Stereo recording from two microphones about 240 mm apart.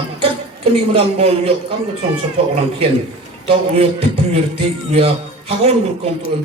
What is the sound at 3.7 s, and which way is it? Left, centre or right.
Speech, right.